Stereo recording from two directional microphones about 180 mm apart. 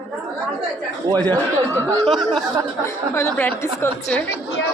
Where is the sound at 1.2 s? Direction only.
20° right (ahead or behind).